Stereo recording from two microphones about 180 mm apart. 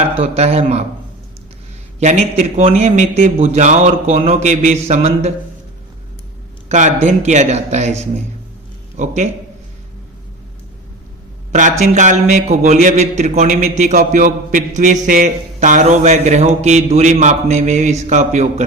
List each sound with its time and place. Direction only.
0.2 s a man's voice: 35° right (ahead or behind)
2.0 s a man's voice: 40° right (ahead or behind)
6.7 s a man's voice: 40° right (ahead or behind)
11.8 s a man's voice: 40° right (ahead or behind)